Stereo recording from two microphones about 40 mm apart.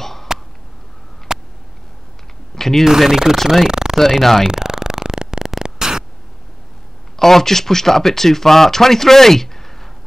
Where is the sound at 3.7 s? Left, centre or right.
Centre.